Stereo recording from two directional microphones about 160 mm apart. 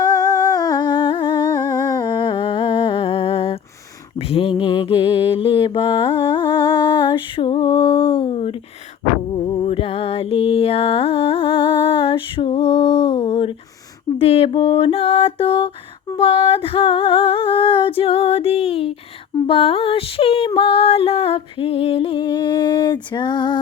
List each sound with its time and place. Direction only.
0.0 s humming: 25° left (ahead or behind)
4.3 s mantra: 35° left (ahead or behind)
9.3 s music: 35° left (ahead or behind)
14.2 s a sound: 40° left (ahead or behind)